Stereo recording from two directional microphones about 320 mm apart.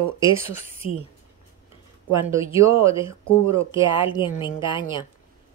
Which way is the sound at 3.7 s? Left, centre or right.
Centre.